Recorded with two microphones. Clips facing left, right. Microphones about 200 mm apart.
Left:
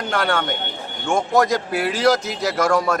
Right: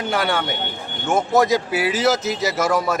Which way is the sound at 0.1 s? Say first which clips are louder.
Left 1 dB; 5° right (ahead or behind).